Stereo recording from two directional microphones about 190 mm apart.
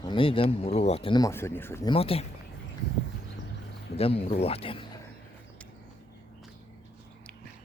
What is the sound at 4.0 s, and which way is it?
Speech, 30° left (ahead or behind).